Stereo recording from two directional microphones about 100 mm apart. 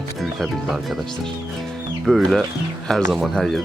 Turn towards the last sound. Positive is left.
turn(degrees=0)  # may be behind; listen again after turning